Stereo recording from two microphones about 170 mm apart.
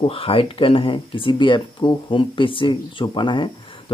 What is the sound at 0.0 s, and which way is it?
Speech, 30° left (ahead or behind).